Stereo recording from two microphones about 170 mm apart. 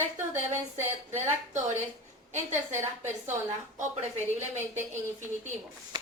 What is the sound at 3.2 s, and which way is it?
Speech, 45° right (ahead or behind).